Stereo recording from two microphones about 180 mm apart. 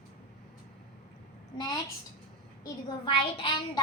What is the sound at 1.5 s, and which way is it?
Speech, 20° left (ahead or behind).